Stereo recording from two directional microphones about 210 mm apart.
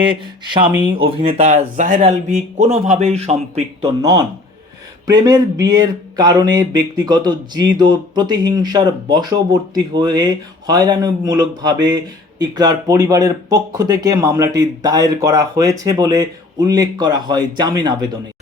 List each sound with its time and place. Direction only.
0.0 s speech: 25° right (ahead or behind)